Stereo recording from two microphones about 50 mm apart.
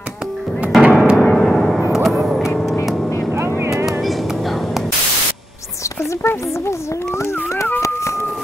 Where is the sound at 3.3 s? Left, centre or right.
Right.